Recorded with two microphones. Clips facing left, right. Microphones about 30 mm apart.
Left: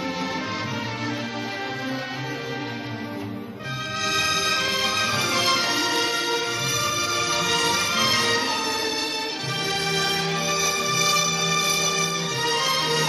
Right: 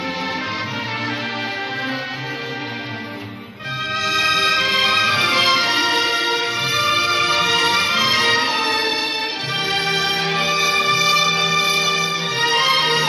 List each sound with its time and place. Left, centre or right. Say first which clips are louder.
4.0 s music: right 6 dB; right
9.7 s music: right 4 dB; right
11.0 s music: right 6 dB; right